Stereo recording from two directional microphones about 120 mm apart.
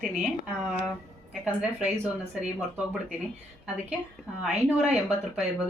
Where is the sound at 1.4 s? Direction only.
10° right (ahead or behind).